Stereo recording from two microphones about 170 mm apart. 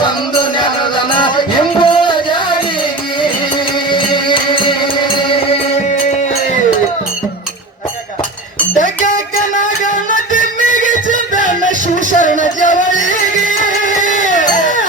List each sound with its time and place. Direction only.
1.2 s music: 30° left (ahead or behind)
3.8 s music: 30° left (ahead or behind)
10.3 s music: 50° left (ahead or behind)
14.1 s a sound: 50° left (ahead or behind)